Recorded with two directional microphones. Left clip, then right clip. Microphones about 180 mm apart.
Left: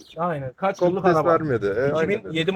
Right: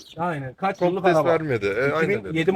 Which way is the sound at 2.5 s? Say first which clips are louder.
Right 4 dB; 20° right (ahead or behind).